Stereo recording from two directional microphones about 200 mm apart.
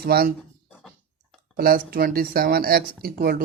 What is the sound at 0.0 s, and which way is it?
Speech, 50° right (ahead or behind).